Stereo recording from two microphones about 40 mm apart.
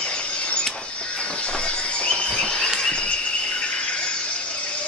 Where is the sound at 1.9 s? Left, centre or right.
Left.